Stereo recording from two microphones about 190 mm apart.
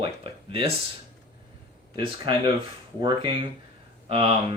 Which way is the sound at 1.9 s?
25° right (ahead or behind).